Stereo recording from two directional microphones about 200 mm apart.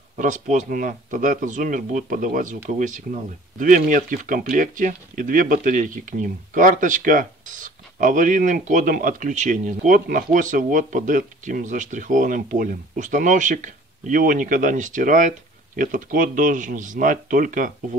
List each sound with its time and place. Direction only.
0.2 s speech: 40° right (ahead or behind)